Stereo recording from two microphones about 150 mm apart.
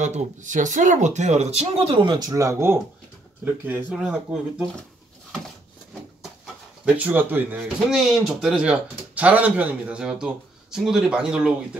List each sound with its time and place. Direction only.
0.0 s speech: 55° right (ahead or behind); by 4.6 s 5° right (ahead or behind)
6.9 s speech: 10° right (ahead or behind)
7.6 s speech: centre (ahead or behind)